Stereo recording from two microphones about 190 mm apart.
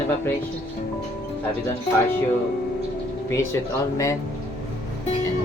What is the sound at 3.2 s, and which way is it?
Speech, 15° left (ahead or behind).